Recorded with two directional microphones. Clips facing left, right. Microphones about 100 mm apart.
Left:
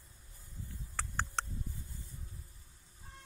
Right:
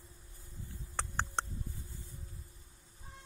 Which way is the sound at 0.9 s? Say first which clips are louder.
Right 1 dB; 20° right (ahead or behind).